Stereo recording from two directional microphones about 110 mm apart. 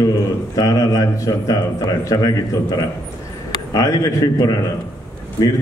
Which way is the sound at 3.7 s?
30° left (ahead or behind).